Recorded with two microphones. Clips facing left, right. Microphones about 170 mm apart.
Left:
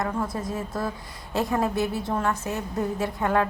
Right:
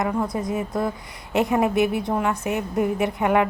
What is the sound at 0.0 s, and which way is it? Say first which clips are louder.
A woman's voice: right 4 dB; 20° right (ahead or behind).